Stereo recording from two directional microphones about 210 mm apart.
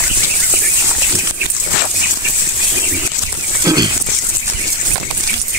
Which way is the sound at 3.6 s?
20° right (ahead or behind).